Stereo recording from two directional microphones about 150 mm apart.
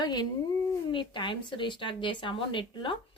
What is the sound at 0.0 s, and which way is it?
A woman's voice, 30° left (ahead or behind).